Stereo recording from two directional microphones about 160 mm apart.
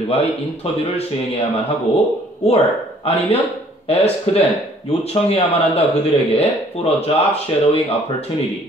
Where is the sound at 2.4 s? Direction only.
40° left (ahead or behind).